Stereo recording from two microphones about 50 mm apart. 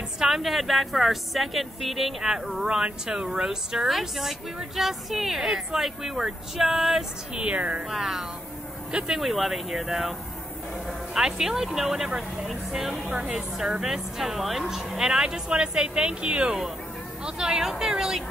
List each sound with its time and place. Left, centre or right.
0.2 s a woman's voice: centre
7.3 s a woman's voice: right
7.9 s a woman's voice: centre
9.2 s a woman's voice: centre
11.1 s a woman's voice: centre